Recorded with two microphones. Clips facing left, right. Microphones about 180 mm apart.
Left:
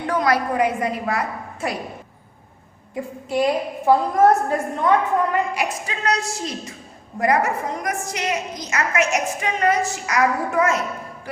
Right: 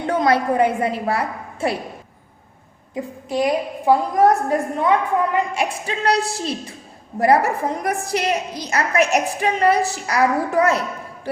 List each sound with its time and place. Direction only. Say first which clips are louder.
0.0 s a woman's voice: right 2 dB; 25° right (ahead or behind)
2.9 s a woman's voice: even; 20° right (ahead or behind)
5.5 s a woman's voice: right 2 dB; 30° right (ahead or behind)